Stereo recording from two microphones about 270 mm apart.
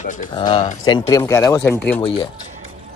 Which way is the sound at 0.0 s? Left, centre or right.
Left.